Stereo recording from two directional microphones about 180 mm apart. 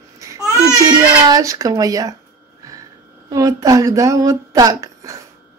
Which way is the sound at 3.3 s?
20° right (ahead or behind).